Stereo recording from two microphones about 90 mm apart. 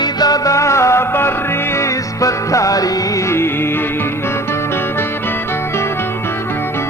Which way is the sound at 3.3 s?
25° left (ahead or behind).